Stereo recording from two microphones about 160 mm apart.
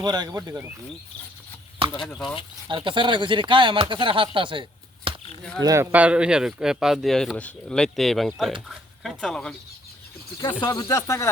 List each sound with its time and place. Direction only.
0.0 s speech: 25° right (ahead or behind)
1.9 s speech: 10° left (ahead or behind)
2.6 s speech: 30° right (ahead or behind)
5.1 s a sound: 35° right (ahead or behind)
5.5 s speech: 20° right (ahead or behind); by 9.6 s 5° left (ahead or behind)
10.6 s speech: 25° left (ahead or behind)